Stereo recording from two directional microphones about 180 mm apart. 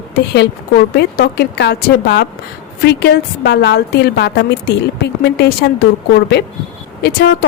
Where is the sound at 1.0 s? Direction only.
60° left (ahead or behind).